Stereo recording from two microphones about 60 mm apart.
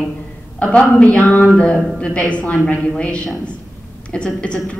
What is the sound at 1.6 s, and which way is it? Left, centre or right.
A woman's voice, centre.